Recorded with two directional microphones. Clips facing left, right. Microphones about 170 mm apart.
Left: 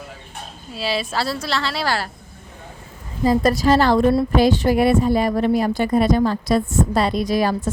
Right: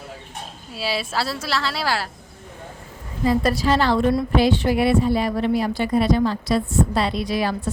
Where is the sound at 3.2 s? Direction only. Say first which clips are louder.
Left 3 dB; 45° left (ahead or behind).